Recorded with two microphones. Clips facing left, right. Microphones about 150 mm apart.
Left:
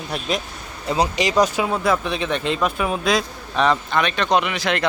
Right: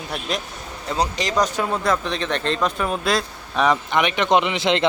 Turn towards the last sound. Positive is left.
turn(degrees=-20)  # may be behind; listen again after turning